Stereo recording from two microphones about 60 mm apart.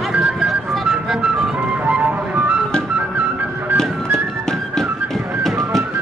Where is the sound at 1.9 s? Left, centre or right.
Right.